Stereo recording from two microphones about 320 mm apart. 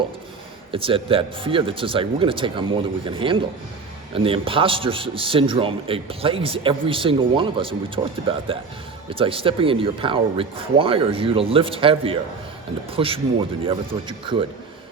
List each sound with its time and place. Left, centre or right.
0.7 s a man's voice: centre